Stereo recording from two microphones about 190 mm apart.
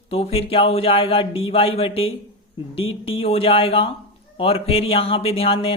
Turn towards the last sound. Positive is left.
turn(degrees=30)  # may be behind; listen again after turning